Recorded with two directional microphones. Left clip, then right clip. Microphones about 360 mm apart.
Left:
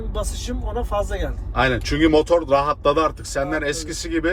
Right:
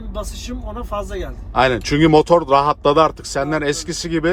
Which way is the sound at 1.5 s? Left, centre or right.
Centre.